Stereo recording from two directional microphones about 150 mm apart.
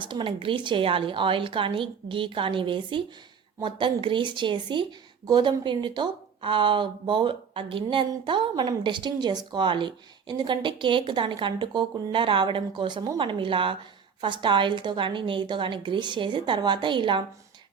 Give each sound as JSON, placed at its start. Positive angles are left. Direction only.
{"t": 0.0, "sound": "speech", "side_deg": -35}